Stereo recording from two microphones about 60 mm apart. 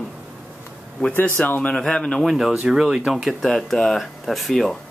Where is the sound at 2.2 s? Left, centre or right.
Centre.